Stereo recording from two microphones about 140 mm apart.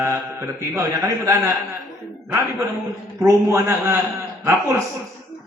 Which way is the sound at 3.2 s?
20° right (ahead or behind).